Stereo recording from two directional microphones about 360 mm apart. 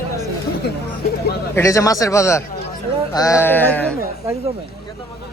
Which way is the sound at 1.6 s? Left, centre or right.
Centre.